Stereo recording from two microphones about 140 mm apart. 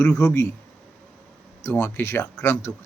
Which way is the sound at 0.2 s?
20° left (ahead or behind).